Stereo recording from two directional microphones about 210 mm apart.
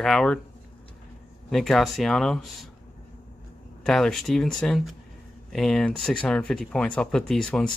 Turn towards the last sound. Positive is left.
turn(degrees=5)  # may be behind; listen again after turning